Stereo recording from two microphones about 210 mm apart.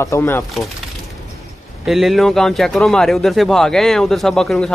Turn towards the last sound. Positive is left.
turn(degrees=5)  # may be behind; listen again after turning